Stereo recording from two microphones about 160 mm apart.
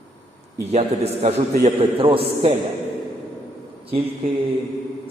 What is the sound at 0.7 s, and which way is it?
A man's voice, 40° right (ahead or behind).